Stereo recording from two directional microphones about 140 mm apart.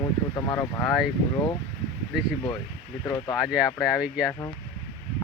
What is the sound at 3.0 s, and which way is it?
Speech, 25° left (ahead or behind).